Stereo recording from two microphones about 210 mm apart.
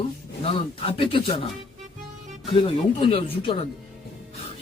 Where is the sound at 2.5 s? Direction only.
25° left (ahead or behind).